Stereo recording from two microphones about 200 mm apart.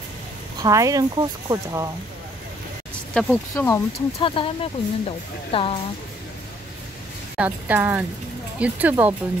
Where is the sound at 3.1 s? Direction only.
10° left (ahead or behind).